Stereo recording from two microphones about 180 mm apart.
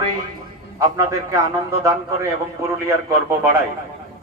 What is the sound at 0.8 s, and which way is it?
A man's voice, 20° right (ahead or behind).